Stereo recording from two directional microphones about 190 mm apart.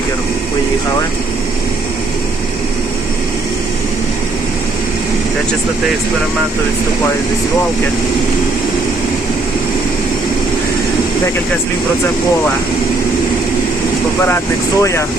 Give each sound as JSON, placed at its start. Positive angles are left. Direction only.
{"t": 14.8, "sound": "speech", "side_deg": 15}